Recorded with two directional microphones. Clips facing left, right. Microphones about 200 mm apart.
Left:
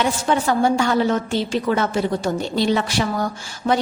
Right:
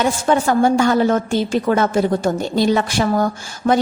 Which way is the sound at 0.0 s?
45° right (ahead or behind).